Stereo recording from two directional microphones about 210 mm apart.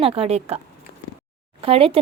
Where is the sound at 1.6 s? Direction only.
25° right (ahead or behind).